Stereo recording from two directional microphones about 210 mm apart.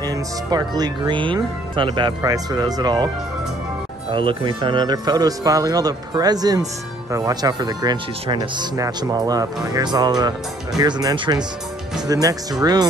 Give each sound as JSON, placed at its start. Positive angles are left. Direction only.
{"t": 0.0, "sound": "speech", "side_deg": -15}
{"t": 4.1, "sound": "speech", "side_deg": -25}